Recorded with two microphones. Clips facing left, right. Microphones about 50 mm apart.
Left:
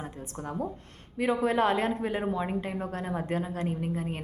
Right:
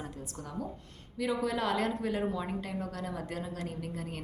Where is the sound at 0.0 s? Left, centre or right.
Left.